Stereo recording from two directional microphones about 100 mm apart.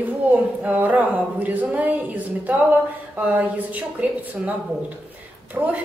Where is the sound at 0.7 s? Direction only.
15° right (ahead or behind).